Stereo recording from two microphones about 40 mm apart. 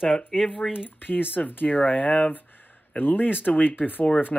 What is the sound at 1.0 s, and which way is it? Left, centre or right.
Speech, left.